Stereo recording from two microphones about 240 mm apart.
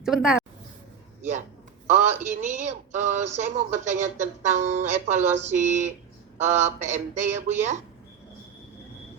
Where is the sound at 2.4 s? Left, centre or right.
Right.